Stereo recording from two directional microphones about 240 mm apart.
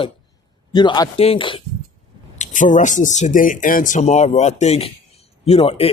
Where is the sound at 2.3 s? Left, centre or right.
Left.